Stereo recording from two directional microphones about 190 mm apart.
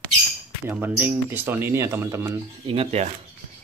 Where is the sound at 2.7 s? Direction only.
30° right (ahead or behind).